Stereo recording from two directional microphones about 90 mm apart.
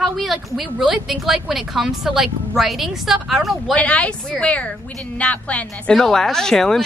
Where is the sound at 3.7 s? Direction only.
15° left (ahead or behind).